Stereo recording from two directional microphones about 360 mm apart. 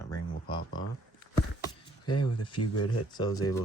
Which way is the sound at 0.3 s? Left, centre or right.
Centre.